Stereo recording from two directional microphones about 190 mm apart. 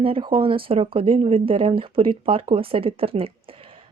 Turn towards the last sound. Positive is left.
turn(degrees=-30)  # may be behind; listen again after turning